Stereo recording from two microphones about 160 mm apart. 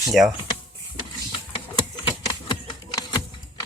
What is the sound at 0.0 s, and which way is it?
Speech, centre (ahead or behind).